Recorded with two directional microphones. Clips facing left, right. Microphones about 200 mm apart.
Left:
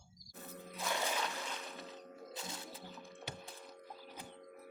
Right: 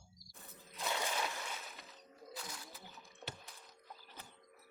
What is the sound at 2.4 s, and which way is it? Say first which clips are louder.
Music: left 3 dB; 25° left (ahead or behind).